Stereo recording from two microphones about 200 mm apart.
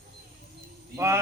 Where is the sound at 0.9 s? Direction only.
15° right (ahead or behind).